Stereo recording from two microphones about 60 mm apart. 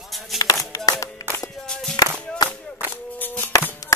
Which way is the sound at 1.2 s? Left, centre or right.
Left.